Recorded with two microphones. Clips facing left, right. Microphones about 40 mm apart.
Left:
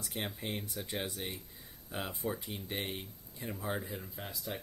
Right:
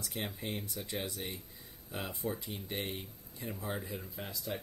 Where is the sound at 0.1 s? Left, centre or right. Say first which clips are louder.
Left 1 dB; centre.